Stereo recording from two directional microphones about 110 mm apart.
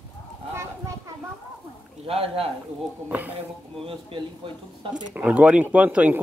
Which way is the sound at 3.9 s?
50° right (ahead or behind).